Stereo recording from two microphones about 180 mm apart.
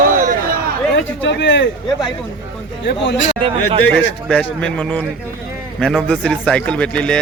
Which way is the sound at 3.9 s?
5° left (ahead or behind).